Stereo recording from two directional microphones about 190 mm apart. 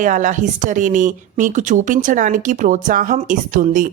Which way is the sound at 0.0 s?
40° right (ahead or behind).